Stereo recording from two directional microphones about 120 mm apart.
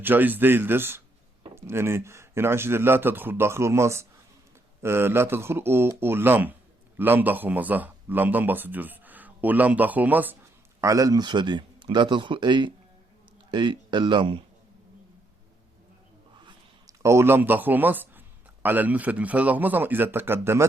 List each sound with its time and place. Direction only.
0.0 s a man's voice: 15° right (ahead or behind)
10.8 s a man's voice: 25° right (ahead or behind); by 14.4 s 45° right (ahead or behind)
16.4 s whispering: 40° right (ahead or behind)
17.0 s a man's voice: 25° right (ahead or behind)